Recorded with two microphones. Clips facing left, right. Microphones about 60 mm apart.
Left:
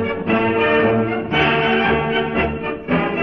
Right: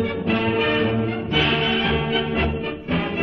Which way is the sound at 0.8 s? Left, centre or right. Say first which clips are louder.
Left 6 dB; left.